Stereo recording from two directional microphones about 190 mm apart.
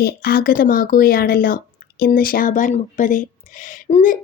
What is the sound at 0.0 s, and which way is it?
Speech, 55° left (ahead or behind).